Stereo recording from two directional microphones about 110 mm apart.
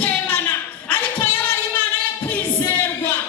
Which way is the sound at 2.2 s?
20° left (ahead or behind).